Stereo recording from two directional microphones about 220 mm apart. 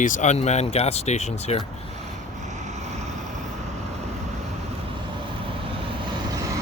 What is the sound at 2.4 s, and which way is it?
Vehicle, 35° right (ahead or behind).